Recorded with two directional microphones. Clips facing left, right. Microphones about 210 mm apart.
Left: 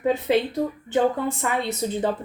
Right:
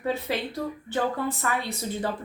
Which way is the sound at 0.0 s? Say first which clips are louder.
Left 7 dB; 20° left (ahead or behind).